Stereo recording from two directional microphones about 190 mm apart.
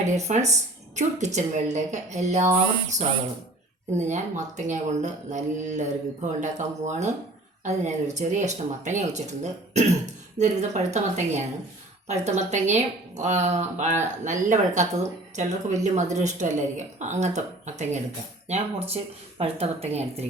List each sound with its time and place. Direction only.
0.0 s speech: 40° right (ahead or behind)
3.9 s speech: 40° right (ahead or behind)